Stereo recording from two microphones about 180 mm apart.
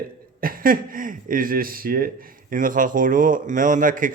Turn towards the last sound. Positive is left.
turn(degrees=-50)  # may be behind; listen again after turning